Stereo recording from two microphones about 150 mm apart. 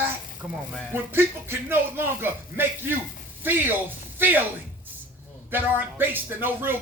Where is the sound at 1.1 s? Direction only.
15° right (ahead or behind).